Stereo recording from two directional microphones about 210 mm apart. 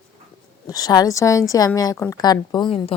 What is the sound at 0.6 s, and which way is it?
A woman's voice, 15° left (ahead or behind).